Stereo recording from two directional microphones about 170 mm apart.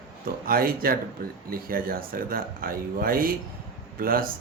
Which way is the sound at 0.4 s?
60° right (ahead or behind).